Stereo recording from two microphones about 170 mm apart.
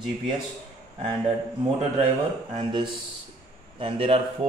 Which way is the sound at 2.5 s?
30° right (ahead or behind).